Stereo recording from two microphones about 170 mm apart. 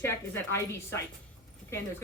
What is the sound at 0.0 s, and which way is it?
A woman's voice, 15° left (ahead or behind).